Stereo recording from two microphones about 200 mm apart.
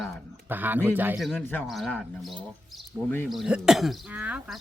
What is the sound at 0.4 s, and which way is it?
Speech, 10° right (ahead or behind).